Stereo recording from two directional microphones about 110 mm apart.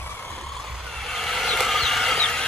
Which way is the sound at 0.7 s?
Centre (ahead or behind).